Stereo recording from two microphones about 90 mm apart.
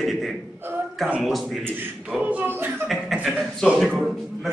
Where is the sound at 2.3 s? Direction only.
20° right (ahead or behind).